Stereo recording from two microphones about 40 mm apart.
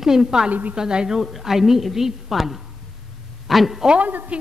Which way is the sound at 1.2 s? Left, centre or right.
Centre.